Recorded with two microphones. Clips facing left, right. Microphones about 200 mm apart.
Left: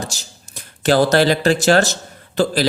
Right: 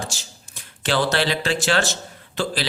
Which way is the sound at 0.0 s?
40° left (ahead or behind).